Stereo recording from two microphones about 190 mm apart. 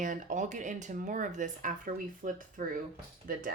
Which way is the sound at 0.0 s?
40° right (ahead or behind).